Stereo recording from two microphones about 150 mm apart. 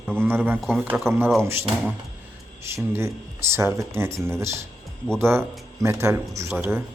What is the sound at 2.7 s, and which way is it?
Speech, 15° right (ahead or behind).